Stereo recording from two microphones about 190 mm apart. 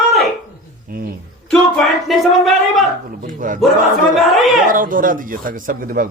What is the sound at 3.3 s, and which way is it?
Speech, 45° right (ahead or behind).